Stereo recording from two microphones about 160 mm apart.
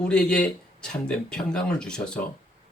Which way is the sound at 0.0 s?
5° left (ahead or behind).